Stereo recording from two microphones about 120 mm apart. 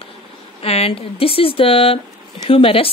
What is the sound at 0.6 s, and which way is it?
Speech, 55° left (ahead or behind).